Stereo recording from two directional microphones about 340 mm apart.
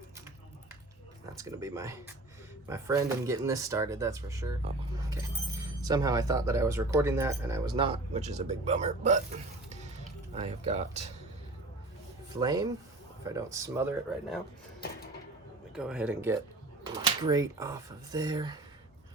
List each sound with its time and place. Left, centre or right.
1.4 s speech: centre
10.3 s speech: centre
12.4 s speech: centre
15.7 s speech: centre